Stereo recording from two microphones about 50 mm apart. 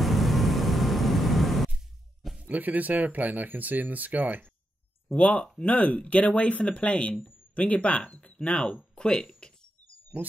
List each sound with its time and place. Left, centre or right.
0.0 s vehicle: centre
2.4 s speech: right
5.0 s a sound: left
5.6 s speech: left
10.1 s speech: right